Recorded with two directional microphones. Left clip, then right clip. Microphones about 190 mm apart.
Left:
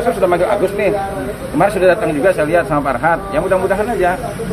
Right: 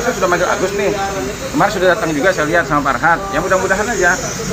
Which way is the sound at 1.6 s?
25° left (ahead or behind).